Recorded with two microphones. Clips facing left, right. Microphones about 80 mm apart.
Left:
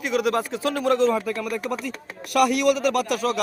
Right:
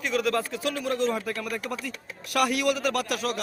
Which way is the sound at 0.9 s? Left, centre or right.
Left.